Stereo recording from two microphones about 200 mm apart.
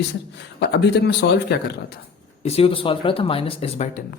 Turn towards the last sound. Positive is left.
turn(degrees=30)  # may be behind; listen again after turning